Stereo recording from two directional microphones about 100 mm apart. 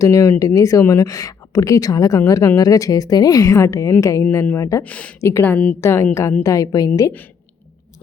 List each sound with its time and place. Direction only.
0.0 s speech: 35° left (ahead or behind)
4.8 s speech: 15° left (ahead or behind)
5.2 s a woman's voice: 25° left (ahead or behind)